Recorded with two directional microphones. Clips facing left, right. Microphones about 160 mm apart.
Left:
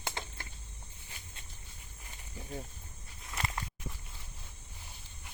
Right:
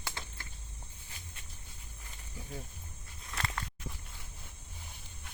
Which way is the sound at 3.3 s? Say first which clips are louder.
Even; 20° left (ahead or behind).